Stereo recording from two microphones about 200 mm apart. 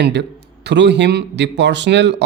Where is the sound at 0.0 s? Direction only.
55° right (ahead or behind).